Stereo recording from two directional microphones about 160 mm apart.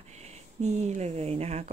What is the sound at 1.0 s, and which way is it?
Speech, 40° right (ahead or behind).